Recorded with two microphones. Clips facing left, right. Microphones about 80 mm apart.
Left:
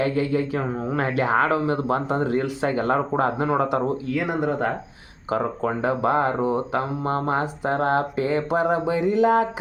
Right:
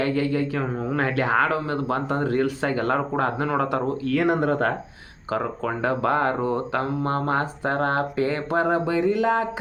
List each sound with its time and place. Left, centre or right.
0.1 s speech: left
4.3 s speech: centre
5.3 s speech: left